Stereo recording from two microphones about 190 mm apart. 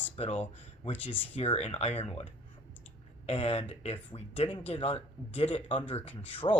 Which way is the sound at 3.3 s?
35° left (ahead or behind).